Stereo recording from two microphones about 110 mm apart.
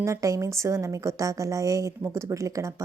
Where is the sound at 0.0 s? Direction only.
30° right (ahead or behind).